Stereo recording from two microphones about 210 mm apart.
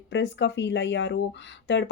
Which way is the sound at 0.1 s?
60° left (ahead or behind).